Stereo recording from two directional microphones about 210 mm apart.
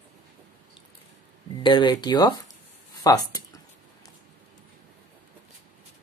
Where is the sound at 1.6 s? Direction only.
20° left (ahead or behind).